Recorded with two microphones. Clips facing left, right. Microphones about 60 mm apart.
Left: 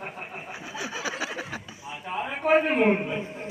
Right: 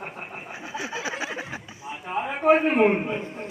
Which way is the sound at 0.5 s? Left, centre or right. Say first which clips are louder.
Right 3 dB; right.